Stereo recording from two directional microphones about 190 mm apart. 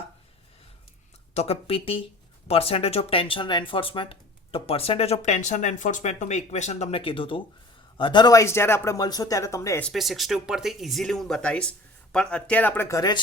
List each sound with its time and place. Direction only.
1.3 s speech: 35° left (ahead or behind); by 9.8 s 15° left (ahead or behind)
9.8 s speech: centre (ahead or behind); by 13.1 s 15° left (ahead or behind)